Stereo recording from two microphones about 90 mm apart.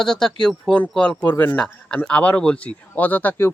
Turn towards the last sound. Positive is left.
turn(degrees=20)  # may be behind; listen again after turning